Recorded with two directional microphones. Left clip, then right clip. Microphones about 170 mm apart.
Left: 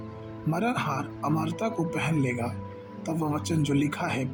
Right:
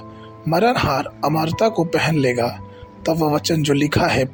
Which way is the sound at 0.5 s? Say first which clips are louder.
Right 12 dB; 50° right (ahead or behind).